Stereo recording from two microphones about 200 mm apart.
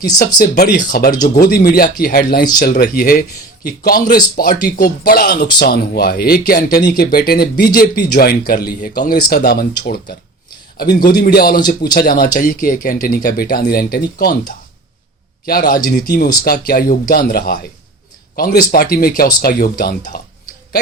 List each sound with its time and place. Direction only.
0.3 s speech: 50° left (ahead or behind)